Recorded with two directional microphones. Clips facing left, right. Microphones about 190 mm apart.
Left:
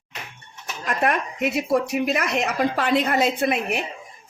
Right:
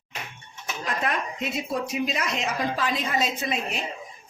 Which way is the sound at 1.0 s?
65° left (ahead or behind).